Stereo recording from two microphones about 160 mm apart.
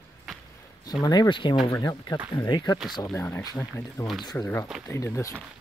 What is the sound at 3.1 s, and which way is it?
Speech, 15° left (ahead or behind).